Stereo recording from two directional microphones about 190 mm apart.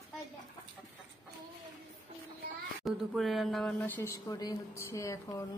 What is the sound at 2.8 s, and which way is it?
A woman's voice, centre (ahead or behind).